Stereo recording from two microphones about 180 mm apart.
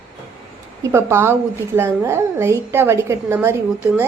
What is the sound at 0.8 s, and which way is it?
A woman's voice, 15° right (ahead or behind).